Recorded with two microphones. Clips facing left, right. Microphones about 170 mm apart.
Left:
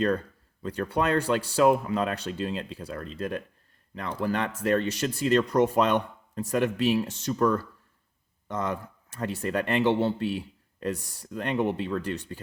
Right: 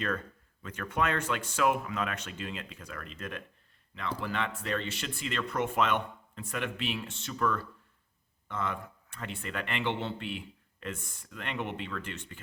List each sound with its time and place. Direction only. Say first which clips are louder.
0.0 s a man's voice: left 8 dB; 35° left (ahead or behind)